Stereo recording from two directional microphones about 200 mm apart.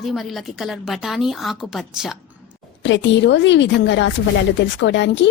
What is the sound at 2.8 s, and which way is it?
Speech, 65° left (ahead or behind).